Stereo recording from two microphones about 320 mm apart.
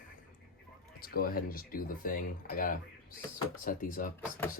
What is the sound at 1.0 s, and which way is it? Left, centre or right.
Speech, left.